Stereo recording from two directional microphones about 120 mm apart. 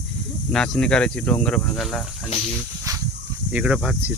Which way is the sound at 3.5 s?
10° right (ahead or behind).